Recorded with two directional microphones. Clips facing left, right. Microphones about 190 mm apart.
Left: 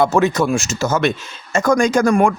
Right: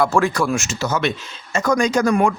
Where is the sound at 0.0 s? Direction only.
20° left (ahead or behind).